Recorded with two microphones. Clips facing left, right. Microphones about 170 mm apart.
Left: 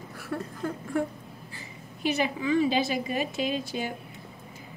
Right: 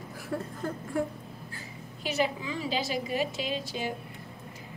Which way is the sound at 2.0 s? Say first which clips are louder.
Left 3 dB; 60° left (ahead or behind).